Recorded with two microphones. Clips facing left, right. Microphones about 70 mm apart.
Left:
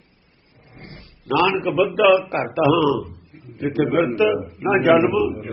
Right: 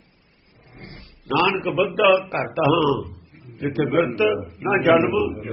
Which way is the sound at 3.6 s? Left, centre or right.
Centre.